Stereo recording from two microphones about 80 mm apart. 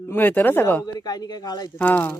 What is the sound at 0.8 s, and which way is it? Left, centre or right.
Speech, left.